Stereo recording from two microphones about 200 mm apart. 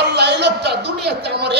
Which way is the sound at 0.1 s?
55° right (ahead or behind).